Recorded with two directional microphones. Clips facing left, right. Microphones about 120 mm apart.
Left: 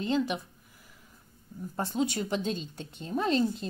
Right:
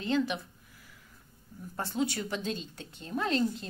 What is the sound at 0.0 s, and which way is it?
Speech, 15° left (ahead or behind).